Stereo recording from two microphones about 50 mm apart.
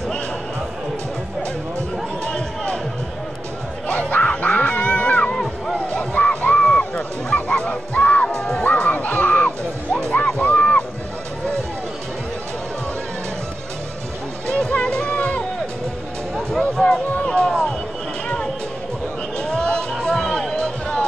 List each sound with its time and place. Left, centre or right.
2.2 s music: left
3.8 s music: left
4.5 s cat: left
5.3 s music: centre
5.9 s music: left
8.5 s music: left
14.8 s music: centre
16.3 s music: centre
19.3 s a sound: centre
19.9 s music: centre